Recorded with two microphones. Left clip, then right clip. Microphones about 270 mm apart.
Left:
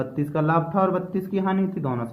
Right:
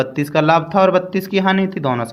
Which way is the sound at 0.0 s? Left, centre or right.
Right.